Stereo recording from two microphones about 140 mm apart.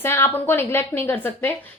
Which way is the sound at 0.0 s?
15° left (ahead or behind).